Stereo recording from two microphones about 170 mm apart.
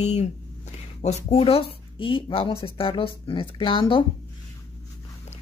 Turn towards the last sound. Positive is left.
turn(degrees=30)  # may be behind; listen again after turning